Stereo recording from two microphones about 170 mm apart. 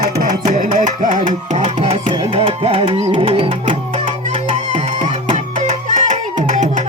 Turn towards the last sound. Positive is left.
turn(degrees=-45)  # may be behind; listen again after turning